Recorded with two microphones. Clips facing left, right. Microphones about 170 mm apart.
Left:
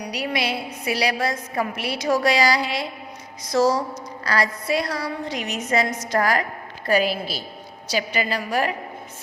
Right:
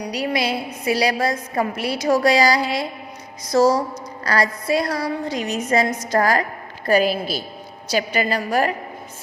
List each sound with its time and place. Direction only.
0.1 s a woman's voice: 40° right (ahead or behind)